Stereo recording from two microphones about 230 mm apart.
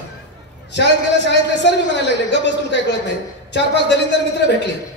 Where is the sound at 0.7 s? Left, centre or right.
Left.